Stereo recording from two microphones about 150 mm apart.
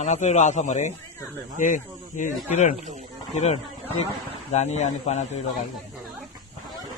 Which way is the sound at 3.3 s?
45° left (ahead or behind).